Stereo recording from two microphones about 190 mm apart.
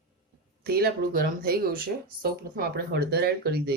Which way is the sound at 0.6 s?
55° right (ahead or behind).